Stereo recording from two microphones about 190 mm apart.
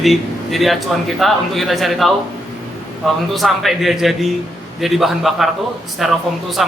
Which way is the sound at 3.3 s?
Centre (ahead or behind).